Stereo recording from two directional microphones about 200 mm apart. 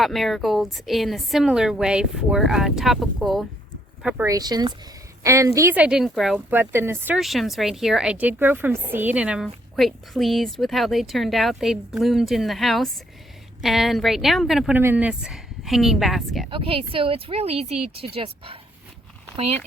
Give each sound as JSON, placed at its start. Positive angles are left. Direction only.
{"t": 0.0, "sound": "speech", "side_deg": 0}
{"t": 4.0, "sound": "speech", "side_deg": -10}
{"t": 16.5, "sound": "speech", "side_deg": -25}